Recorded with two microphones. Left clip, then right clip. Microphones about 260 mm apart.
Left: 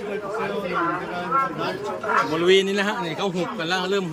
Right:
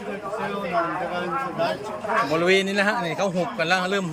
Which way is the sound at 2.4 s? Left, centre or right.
Centre.